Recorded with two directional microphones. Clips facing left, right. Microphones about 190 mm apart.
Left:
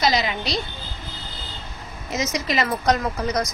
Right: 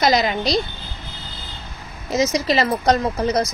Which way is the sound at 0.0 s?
45° right (ahead or behind).